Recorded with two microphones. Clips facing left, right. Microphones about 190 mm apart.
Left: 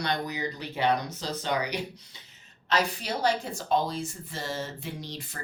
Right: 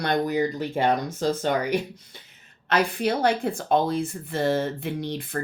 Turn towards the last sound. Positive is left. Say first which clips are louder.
# right 10 dB
turn(degrees=-55)  # may be behind; listen again after turning